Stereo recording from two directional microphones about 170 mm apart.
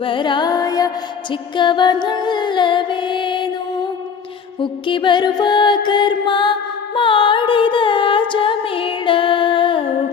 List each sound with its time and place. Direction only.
0.0 s music: 30° left (ahead or behind)
4.6 s music: 30° left (ahead or behind)